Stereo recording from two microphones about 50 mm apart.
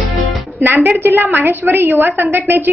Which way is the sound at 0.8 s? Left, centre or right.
Right.